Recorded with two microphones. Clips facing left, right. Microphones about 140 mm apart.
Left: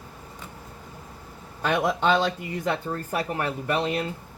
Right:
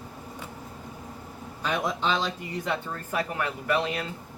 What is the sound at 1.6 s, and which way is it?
Speech, 60° left (ahead or behind).